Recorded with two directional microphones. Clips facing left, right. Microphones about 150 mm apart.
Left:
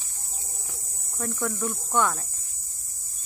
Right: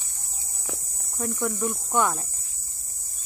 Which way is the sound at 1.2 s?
10° right (ahead or behind).